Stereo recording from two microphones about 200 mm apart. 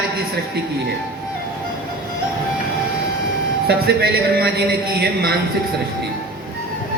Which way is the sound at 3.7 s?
50° right (ahead or behind).